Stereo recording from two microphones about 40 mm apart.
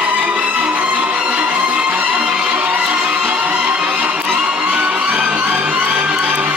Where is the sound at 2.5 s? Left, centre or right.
Right.